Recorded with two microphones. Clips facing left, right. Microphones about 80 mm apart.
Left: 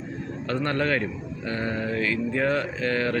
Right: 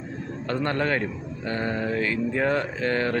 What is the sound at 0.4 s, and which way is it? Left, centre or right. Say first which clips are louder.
Speech: even; right.